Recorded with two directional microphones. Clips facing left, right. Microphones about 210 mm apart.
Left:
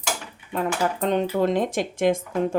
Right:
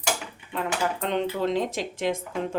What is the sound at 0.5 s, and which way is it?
Speech, 45° left (ahead or behind).